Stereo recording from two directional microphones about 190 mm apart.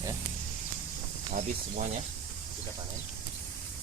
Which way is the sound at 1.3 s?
40° right (ahead or behind).